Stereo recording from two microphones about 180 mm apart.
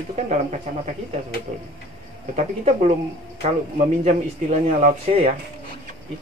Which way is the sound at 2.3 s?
35° right (ahead or behind).